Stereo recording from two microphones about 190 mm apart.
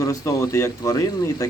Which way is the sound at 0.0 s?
15° left (ahead or behind).